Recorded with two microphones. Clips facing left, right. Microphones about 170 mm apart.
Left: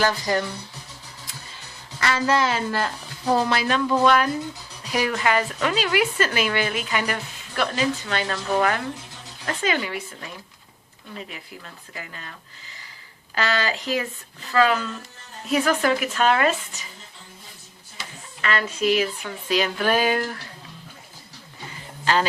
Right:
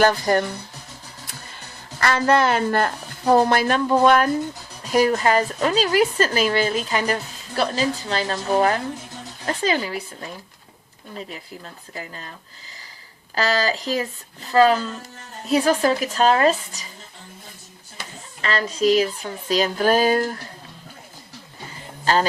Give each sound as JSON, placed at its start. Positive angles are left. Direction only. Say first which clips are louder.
{"t": 0.0, "sound": "speech", "louder": "right 5 dB", "side_deg": -50}
{"t": 1.5, "sound": "a woman's voice", "louder": "right 3 dB", "side_deg": -55}
{"t": 13.3, "sound": "a woman's voice", "louder": "right 3 dB", "side_deg": -35}
{"t": 18.4, "sound": "a woman's voice", "louder": "right 3 dB", "side_deg": -35}
{"t": 22.0, "sound": "speech", "louder": "right 2 dB", "side_deg": -40}